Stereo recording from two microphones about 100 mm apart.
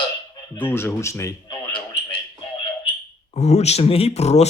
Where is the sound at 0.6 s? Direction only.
20° left (ahead or behind).